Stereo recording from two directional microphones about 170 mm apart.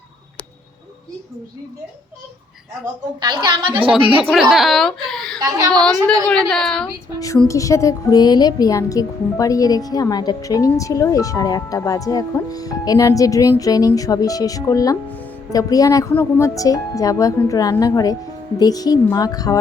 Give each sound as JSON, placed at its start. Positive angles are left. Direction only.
{"t": 3.2, "sound": "a woman's voice", "side_deg": -25}
{"t": 4.4, "sound": "speech", "side_deg": 0}
{"t": 5.4, "sound": "a woman's voice", "side_deg": -20}
{"t": 6.2, "sound": "a woman's voice", "side_deg": 5}
{"t": 7.4, "sound": "a woman's voice", "side_deg": 20}